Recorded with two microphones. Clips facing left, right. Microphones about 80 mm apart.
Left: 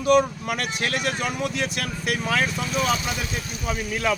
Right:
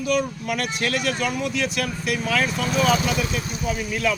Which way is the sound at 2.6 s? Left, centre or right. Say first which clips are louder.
Right 4 dB; right.